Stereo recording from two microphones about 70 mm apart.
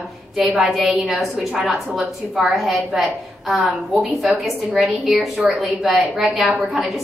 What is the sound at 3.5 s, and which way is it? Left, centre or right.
Speech, centre.